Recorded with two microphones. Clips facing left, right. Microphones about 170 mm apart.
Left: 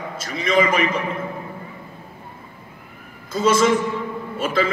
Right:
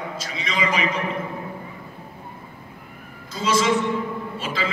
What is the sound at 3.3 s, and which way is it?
A man's voice, 55° left (ahead or behind).